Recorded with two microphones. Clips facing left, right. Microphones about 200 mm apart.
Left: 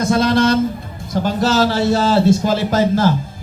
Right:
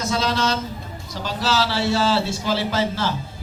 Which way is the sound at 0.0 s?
55° left (ahead or behind).